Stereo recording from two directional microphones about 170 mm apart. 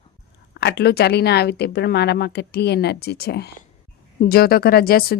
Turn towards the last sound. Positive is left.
turn(degrees=60)  # may be behind; listen again after turning